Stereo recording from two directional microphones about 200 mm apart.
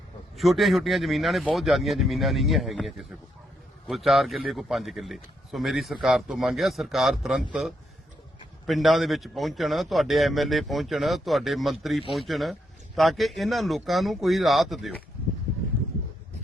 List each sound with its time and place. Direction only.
0.3 s a man's voice: centre (ahead or behind)
8.6 s a man's voice: centre (ahead or behind)